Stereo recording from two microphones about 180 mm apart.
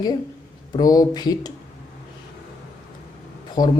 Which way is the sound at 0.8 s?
20° left (ahead or behind).